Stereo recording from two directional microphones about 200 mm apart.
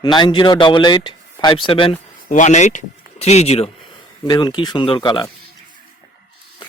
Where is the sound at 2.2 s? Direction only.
40° left (ahead or behind).